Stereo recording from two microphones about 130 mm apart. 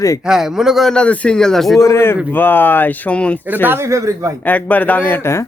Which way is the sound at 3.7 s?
20° right (ahead or behind).